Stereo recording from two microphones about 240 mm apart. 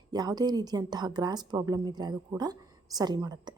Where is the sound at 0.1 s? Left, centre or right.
Centre.